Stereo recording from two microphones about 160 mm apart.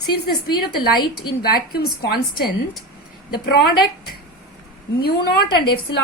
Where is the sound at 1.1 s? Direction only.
80° left.